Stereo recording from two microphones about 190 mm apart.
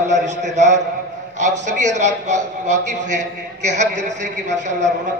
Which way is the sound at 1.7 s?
40° right (ahead or behind).